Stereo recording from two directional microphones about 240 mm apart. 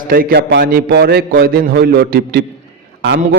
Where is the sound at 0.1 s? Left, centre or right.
Right.